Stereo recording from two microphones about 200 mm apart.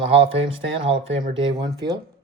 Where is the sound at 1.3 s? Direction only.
60° right (ahead or behind).